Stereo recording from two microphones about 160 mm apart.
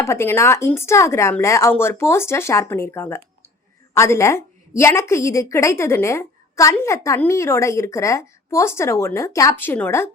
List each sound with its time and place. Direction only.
0.0 s a woman's voice: 15° left (ahead or behind)